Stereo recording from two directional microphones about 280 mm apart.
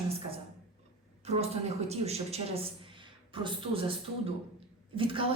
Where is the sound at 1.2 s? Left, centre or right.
Right.